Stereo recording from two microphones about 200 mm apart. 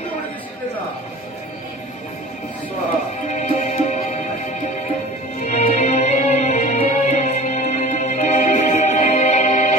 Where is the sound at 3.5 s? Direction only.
35° left (ahead or behind).